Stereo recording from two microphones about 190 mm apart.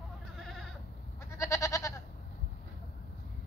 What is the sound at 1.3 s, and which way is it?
Goat, 15° left (ahead or behind).